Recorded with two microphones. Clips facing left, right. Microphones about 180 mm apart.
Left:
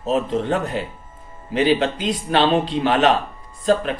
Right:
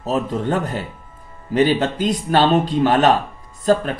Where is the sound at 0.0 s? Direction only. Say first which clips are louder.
Left 1 dB; 40° right (ahead or behind).